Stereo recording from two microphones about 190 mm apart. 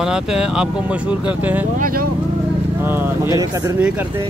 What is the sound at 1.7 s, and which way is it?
Speech, 45° right (ahead or behind).